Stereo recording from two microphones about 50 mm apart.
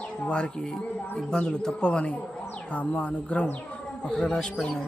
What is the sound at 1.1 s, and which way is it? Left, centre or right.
Speech, centre.